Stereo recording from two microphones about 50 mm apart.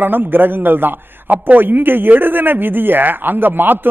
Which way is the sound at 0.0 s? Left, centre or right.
Right.